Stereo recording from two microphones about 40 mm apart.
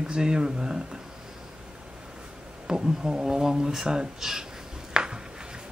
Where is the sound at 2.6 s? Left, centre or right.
Centre.